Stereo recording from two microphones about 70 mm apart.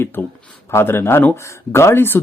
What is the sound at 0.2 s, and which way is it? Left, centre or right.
Speech, left.